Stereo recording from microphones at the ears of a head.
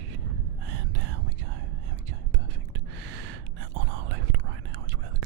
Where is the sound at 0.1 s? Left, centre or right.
Right.